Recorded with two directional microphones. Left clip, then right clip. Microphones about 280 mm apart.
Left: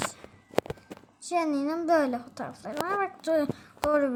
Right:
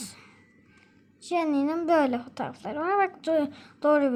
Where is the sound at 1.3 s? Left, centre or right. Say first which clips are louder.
Right 2 dB; centre.